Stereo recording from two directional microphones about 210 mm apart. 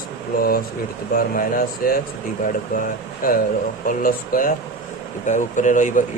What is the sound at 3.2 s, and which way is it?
Speech, 40° left (ahead or behind).